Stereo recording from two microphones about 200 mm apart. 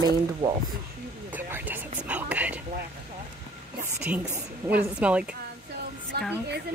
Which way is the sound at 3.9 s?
5° right (ahead or behind).